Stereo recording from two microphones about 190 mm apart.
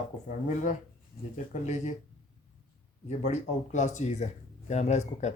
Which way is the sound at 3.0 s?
35° left (ahead or behind).